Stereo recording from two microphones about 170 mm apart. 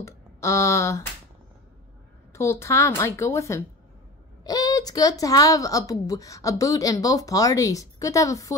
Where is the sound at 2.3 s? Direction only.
15° left (ahead or behind).